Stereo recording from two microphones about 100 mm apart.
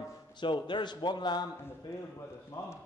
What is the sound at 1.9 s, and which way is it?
Speech, 25° left (ahead or behind).